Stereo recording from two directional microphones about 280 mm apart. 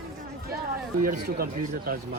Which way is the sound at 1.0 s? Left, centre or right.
Right.